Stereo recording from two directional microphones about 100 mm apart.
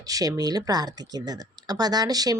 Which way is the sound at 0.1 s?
35° right (ahead or behind).